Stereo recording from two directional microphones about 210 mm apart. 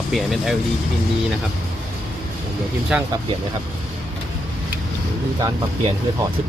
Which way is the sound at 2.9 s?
5° right (ahead or behind).